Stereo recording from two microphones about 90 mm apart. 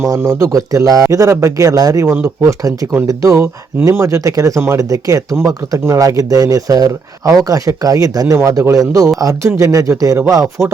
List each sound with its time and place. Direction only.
0.3 s speech: 35° right (ahead or behind)
8.4 s speech: 30° right (ahead or behind)
10.6 s chopping: centre (ahead or behind)